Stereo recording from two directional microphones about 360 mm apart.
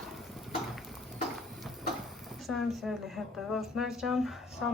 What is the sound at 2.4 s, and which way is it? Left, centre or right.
A woman's voice, centre.